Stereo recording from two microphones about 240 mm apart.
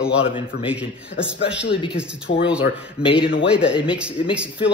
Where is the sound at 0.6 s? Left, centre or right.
Centre.